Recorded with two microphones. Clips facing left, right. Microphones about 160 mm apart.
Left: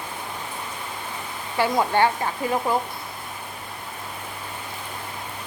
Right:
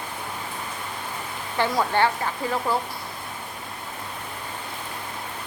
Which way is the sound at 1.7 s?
15° left (ahead or behind).